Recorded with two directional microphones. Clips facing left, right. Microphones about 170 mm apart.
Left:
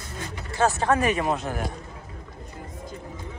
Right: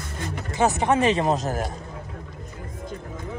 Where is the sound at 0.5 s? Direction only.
20° right (ahead or behind).